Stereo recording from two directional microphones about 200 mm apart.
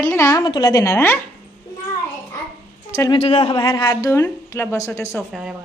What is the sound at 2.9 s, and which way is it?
Speech, 15° left (ahead or behind).